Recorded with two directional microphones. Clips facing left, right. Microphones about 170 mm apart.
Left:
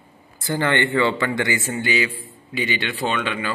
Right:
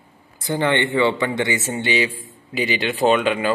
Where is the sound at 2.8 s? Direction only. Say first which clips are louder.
Right 7 dB; 40° right (ahead or behind).